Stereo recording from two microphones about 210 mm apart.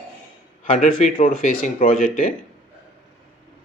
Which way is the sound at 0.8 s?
40° left (ahead or behind).